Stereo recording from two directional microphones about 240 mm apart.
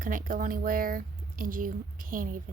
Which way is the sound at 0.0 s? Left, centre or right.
Right.